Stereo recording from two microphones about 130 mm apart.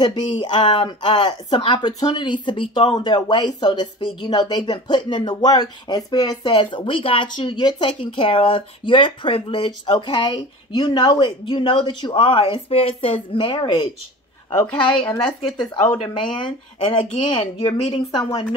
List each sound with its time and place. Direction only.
0.0 s speech: 35° left (ahead or behind)
3.0 s speech: 35° left (ahead or behind)
14.6 s speech: 10° left (ahead or behind)
15.9 s speech: 40° left (ahead or behind)